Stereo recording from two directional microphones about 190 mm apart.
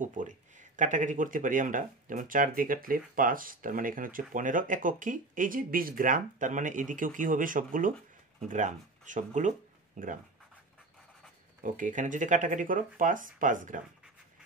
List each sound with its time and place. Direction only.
0.0 s speech: 40° right (ahead or behind)
11.6 s speech: 45° right (ahead or behind)